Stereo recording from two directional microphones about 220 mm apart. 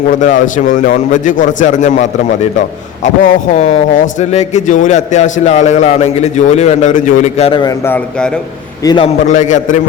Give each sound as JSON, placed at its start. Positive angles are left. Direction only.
{"t": 0.1, "sound": "a man's voice", "side_deg": 35}
{"t": 7.9, "sound": "a man's voice", "side_deg": 5}
{"t": 8.8, "sound": "a man's voice", "side_deg": 20}
{"t": 9.2, "sound": "a man's voice", "side_deg": 35}